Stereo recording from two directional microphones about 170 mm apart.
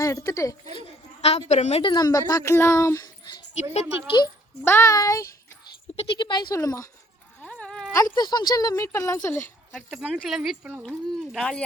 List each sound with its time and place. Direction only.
0.0 s speech: 20° left (ahead or behind)
1.2 s a woman's voice: 40° left (ahead or behind)
1.9 s speech: 25° left (ahead or behind)
4.6 s speech: 15° left (ahead or behind)
7.4 s wail: 5° left (ahead or behind)
7.9 s speech: 20° left (ahead or behind)
9.7 s speech: centre (ahead or behind)